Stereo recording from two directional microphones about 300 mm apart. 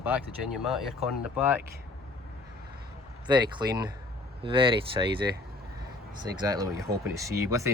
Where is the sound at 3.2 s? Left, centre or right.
Centre.